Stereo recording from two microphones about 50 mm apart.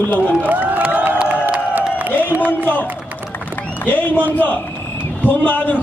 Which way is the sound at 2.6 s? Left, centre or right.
Left.